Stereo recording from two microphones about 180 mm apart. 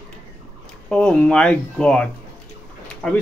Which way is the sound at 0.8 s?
5° left (ahead or behind).